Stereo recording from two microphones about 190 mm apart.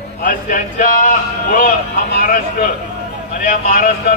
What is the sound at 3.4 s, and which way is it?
Speech, 40° left (ahead or behind).